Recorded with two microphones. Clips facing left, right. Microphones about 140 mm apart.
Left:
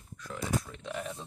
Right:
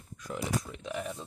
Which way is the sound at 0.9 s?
5° right (ahead or behind).